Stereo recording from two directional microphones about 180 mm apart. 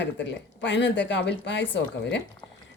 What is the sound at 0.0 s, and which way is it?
Speech, 75° left (ahead or behind).